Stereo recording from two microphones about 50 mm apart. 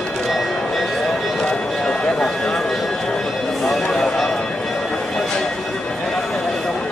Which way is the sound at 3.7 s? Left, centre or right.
Centre.